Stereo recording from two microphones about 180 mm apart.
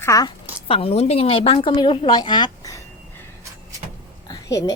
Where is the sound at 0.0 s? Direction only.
20° left (ahead or behind).